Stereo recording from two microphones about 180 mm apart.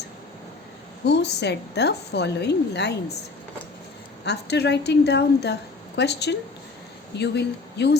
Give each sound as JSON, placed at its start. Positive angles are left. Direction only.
{"t": 1.0, "sound": "a woman's voice", "side_deg": 70}
{"t": 4.3, "sound": "a woman's voice", "side_deg": 70}